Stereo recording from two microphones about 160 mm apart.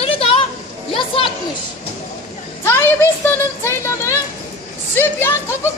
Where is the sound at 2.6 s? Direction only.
15° left (ahead or behind).